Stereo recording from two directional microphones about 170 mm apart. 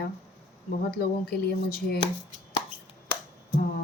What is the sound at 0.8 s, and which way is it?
Speech, 65° left (ahead or behind).